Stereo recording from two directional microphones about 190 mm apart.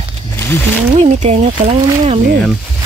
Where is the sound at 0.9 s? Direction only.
35° right (ahead or behind).